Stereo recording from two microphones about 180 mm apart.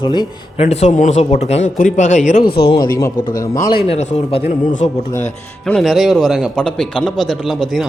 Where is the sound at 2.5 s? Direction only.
65° left (ahead or behind).